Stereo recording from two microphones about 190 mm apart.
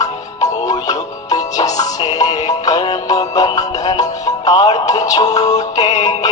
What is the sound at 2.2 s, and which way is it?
Music, 20° left (ahead or behind).